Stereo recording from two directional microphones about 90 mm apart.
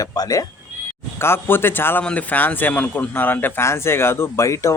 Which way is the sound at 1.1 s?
25° left (ahead or behind).